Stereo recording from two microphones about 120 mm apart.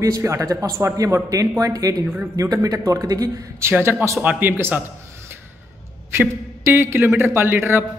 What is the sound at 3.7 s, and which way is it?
A man's voice, 20° right (ahead or behind).